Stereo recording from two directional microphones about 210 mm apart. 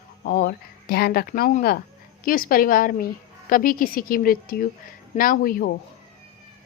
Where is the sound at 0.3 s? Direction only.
50° left (ahead or behind).